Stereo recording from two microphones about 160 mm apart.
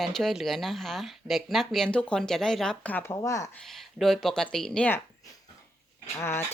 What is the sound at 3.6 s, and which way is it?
Speech, centre (ahead or behind).